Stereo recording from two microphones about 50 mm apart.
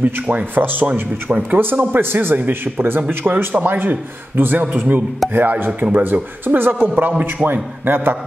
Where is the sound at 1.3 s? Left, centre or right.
Right.